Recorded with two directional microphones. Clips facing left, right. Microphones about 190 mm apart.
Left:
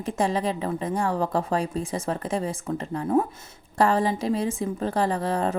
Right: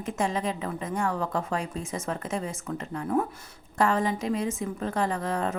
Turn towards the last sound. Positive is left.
turn(degrees=30)  # may be behind; listen again after turning